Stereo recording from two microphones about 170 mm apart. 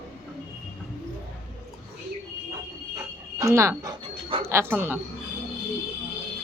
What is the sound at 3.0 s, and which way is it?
Dog, 15° right (ahead or behind).